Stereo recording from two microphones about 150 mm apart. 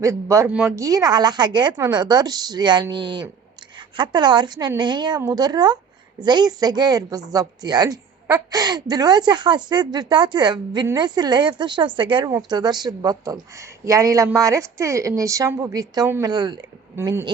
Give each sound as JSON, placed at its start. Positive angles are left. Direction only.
{"t": 0.0, "sound": "a woman's voice", "side_deg": -20}
{"t": 16.3, "sound": "a woman's voice", "side_deg": -30}